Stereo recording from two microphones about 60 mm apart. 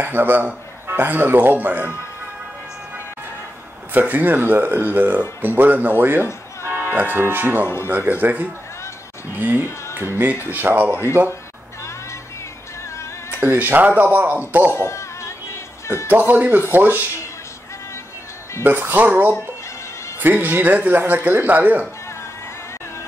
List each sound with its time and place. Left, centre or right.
0.0 s speech: right
3.9 s speech: right
7.6 s speech: left
7.9 s speech: right
13.3 s speech: right
14.7 s music: left
16.1 s speech: right
18.6 s speech: right